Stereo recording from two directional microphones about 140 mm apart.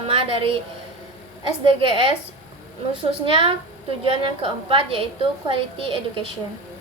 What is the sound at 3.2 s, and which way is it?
A woman's voice, 40° right (ahead or behind).